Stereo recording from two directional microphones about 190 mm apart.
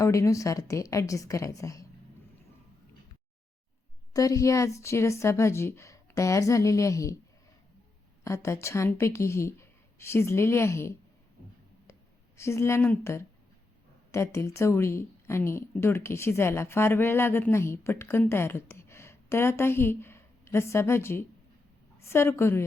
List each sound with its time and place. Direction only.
0.0 s speech: 15° left (ahead or behind)
4.1 s speech: 20° left (ahead or behind)
8.2 s speech: 15° left (ahead or behind)
12.4 s speech: 15° left (ahead or behind)